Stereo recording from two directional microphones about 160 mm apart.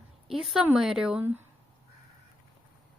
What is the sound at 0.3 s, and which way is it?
A woman's voice, 5° right (ahead or behind).